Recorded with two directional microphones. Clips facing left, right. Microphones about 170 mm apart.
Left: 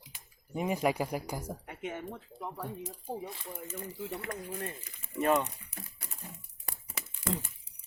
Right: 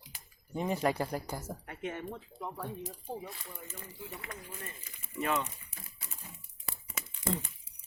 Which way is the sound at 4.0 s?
70° left (ahead or behind).